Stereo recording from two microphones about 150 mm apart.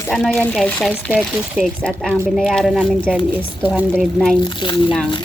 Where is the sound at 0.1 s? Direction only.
Centre (ahead or behind).